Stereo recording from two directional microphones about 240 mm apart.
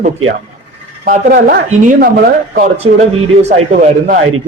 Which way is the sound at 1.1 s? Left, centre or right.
Right.